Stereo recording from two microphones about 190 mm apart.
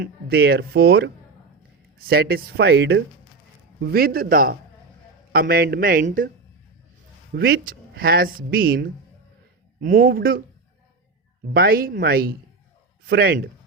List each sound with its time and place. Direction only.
0.0 s speech: 55° right (ahead or behind)
7.3 s speech: 50° right (ahead or behind)
11.5 s speech: 50° right (ahead or behind)